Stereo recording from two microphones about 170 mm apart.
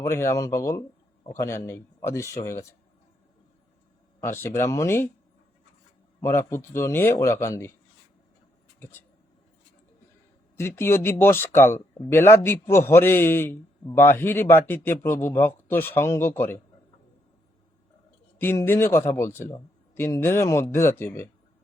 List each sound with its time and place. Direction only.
0.0 s a man's voice: 15° left (ahead or behind)
4.2 s a man's voice: 15° left (ahead or behind)
6.2 s a man's voice: 15° left (ahead or behind)
8.8 s speech: 15° left (ahead or behind)
10.6 s a man's voice: 15° left (ahead or behind)
18.3 s a man's voice: 15° left (ahead or behind)